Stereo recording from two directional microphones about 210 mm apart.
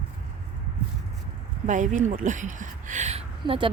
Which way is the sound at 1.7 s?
35° right (ahead or behind).